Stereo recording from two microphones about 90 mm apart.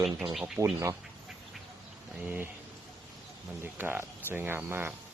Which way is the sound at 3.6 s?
25° right (ahead or behind).